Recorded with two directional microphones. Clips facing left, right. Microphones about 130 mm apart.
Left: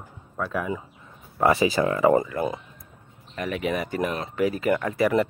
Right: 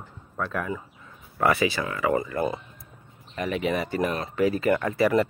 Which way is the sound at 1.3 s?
25° left (ahead or behind).